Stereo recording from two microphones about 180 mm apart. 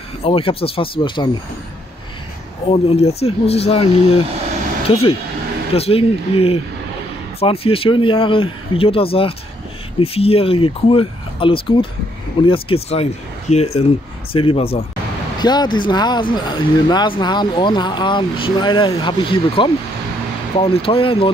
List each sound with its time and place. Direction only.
0.2 s speech: 30° left (ahead or behind)
2.7 s speech: 35° left (ahead or behind)
5.8 s speech: 35° left (ahead or behind)